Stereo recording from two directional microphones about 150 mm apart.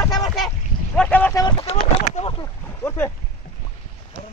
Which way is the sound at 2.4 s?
15° left (ahead or behind).